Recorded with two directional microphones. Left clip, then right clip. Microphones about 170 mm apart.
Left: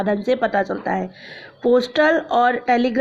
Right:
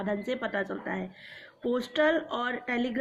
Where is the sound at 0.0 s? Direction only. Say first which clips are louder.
Left 12 dB; 40° left (ahead or behind).